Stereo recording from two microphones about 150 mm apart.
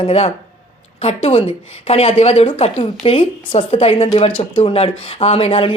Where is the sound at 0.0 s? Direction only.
45° left (ahead or behind).